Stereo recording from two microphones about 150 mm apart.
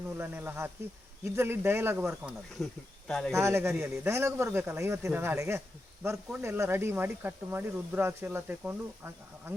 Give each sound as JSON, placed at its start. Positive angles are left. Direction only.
{"t": 0.2, "sound": "speech", "side_deg": -15}
{"t": 2.6, "sound": "speech", "side_deg": 0}
{"t": 3.3, "sound": "speech", "side_deg": -20}